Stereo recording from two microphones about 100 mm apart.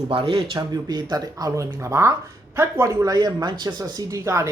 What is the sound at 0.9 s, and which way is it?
Speech, 40° right (ahead or behind).